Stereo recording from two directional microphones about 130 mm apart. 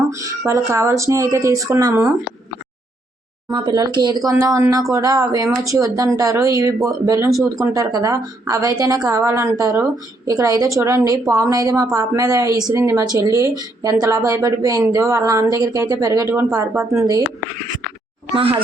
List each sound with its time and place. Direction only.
0.1 s speech: 25° right (ahead or behind)
3.5 s speech: 35° right (ahead or behind)